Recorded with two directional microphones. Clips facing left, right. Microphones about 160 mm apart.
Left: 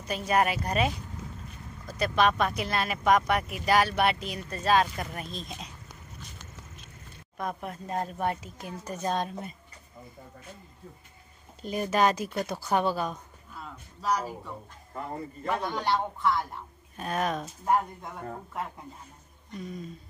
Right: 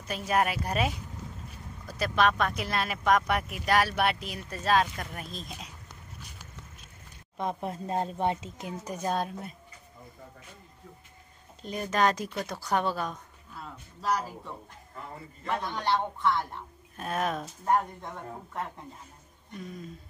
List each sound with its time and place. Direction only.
0.0 s speech: centre (ahead or behind)
7.3 s a woman's voice: 25° right (ahead or behind); by 9.6 s 5° right (ahead or behind)
11.6 s speech: 5° left (ahead or behind)